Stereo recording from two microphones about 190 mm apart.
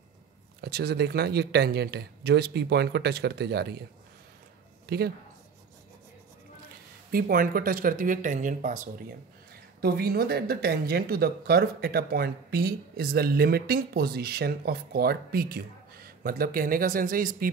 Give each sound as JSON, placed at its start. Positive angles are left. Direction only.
{"t": 0.6, "sound": "speech", "side_deg": -60}
{"t": 4.8, "sound": "speech", "side_deg": -55}
{"t": 7.1, "sound": "speech", "side_deg": -50}
{"t": 9.8, "sound": "speech", "side_deg": -55}